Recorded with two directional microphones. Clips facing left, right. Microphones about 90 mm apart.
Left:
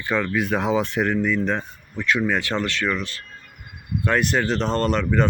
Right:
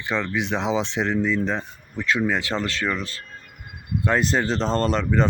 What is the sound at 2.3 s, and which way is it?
Speech, 25° right (ahead or behind).